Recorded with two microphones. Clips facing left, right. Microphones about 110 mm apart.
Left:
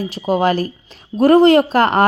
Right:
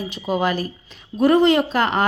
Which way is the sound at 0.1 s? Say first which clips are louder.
Left 5 dB; 40° left (ahead or behind).